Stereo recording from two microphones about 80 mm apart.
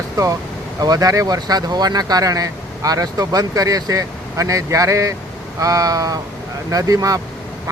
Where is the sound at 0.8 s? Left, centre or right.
Right.